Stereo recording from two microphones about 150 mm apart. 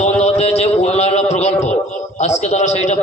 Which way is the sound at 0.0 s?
45° left (ahead or behind).